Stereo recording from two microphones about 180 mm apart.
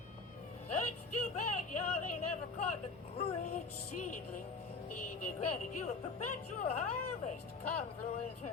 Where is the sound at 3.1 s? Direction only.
40° left (ahead or behind).